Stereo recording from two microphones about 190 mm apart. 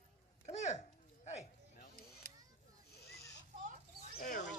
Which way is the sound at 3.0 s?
60° left (ahead or behind).